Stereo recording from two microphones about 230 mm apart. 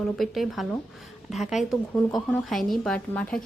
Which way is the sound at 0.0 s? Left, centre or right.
Centre.